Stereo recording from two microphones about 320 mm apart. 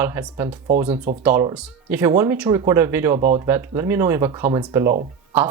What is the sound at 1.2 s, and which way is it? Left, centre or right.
Speech, centre.